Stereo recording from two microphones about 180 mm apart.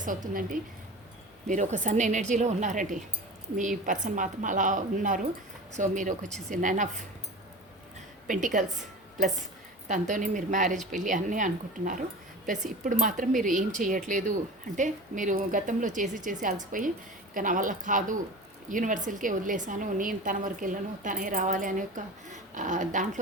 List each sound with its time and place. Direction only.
0.0 s a woman's voice: 50° right (ahead or behind)
8.3 s a woman's voice: 50° right (ahead or behind)
9.9 s a woman's voice: 45° right (ahead or behind)